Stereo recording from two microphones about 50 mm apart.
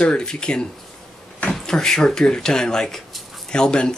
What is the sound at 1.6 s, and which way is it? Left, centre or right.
Speech, centre.